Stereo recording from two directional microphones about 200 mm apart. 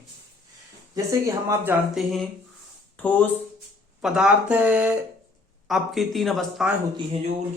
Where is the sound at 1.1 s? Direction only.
15° right (ahead or behind).